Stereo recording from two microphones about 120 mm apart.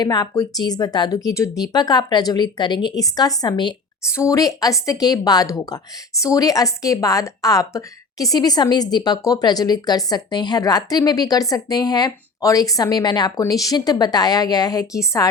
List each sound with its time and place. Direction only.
0.0 s a woman's voice: 35° left (ahead or behind)
4.0 s a woman's voice: 25° left (ahead or behind)